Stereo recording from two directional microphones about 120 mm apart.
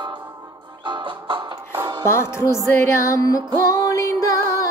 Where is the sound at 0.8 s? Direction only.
45° right (ahead or behind).